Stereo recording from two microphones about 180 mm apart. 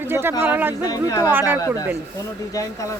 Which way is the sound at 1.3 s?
10° right (ahead or behind).